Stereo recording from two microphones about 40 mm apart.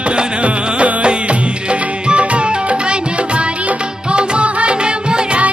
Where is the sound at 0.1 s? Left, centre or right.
Right.